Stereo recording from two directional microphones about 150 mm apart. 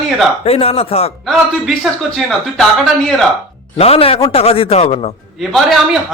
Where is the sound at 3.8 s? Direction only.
40° left (ahead or behind).